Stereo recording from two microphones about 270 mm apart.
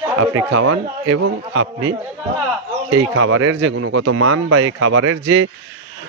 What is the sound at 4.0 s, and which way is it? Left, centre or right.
Speech, right.